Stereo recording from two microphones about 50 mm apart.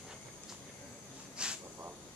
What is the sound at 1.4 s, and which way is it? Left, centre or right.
Hiss, centre.